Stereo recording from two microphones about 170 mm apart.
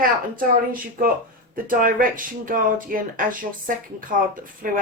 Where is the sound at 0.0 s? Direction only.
55° right (ahead or behind).